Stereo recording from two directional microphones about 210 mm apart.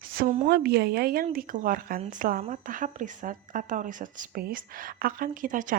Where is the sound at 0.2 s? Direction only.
45° right (ahead or behind).